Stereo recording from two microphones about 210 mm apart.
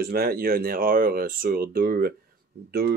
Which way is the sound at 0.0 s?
45° right (ahead or behind).